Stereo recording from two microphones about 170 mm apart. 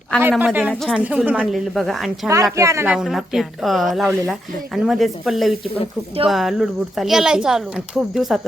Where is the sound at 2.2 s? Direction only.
20° right (ahead or behind).